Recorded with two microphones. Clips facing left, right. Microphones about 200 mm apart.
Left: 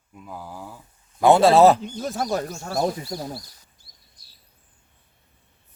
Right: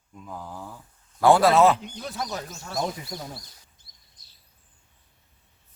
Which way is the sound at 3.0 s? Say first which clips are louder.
Left 6 dB; 30° left (ahead or behind).